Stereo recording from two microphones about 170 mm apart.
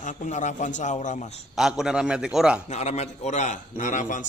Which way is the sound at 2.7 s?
40° left (ahead or behind).